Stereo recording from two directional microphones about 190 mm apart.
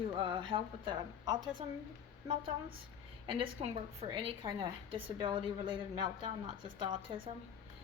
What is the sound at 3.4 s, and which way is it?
A woman's voice, 30° right (ahead or behind).